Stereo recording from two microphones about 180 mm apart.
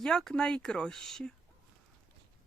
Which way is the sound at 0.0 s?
5° left (ahead or behind).